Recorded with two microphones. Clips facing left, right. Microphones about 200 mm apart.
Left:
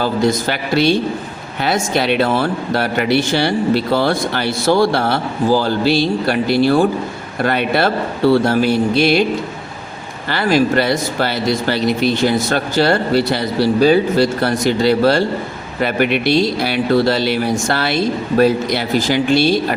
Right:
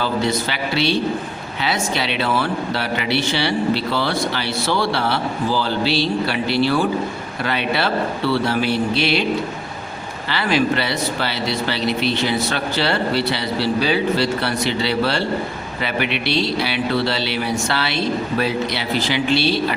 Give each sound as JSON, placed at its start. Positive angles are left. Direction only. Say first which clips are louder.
{"t": 0.0, "sound": "speech", "louder": "left 4 dB", "side_deg": 45}
{"t": 10.2, "sound": "speech", "louder": "left 4 dB", "side_deg": 45}